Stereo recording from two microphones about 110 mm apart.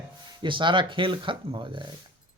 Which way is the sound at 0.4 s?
50° right (ahead or behind).